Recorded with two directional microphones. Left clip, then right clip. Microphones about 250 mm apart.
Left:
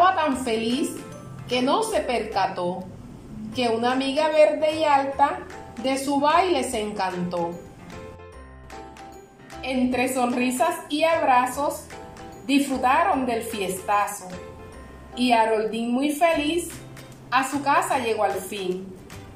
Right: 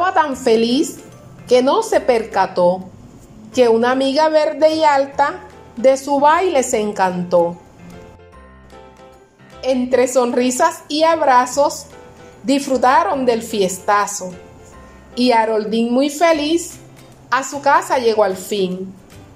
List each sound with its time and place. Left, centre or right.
0.0 s a woman's voice: right
9.6 s a woman's voice: right
15.1 s a woman's voice: right
17.3 s a woman's voice: right